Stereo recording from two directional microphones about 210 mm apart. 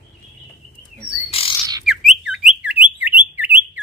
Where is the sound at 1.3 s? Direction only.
25° left (ahead or behind).